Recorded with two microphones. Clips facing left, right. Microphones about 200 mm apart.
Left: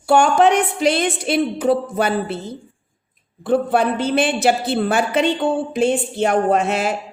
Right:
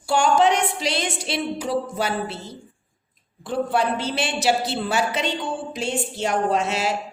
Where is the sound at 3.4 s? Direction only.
55° left (ahead or behind).